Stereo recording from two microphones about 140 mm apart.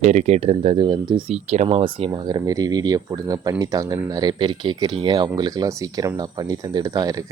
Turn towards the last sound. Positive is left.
turn(degrees=-25)  # may be behind; listen again after turning